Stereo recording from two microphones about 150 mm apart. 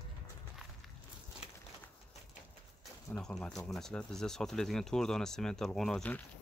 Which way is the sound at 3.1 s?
5° left (ahead or behind).